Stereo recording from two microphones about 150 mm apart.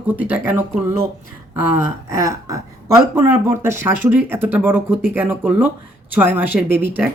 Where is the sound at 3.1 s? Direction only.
15° right (ahead or behind).